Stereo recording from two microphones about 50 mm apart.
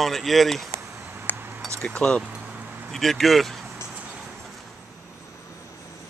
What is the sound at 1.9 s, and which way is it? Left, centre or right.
Speech, left.